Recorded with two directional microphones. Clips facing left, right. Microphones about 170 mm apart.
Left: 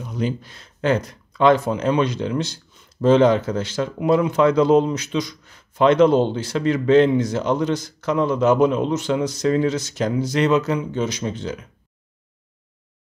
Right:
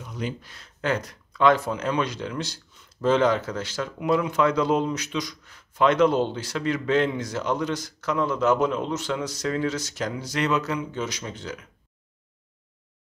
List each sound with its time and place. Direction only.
0.0 s speech: 30° left (ahead or behind)